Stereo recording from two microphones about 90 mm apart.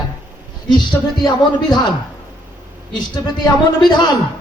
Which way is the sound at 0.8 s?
55° left (ahead or behind).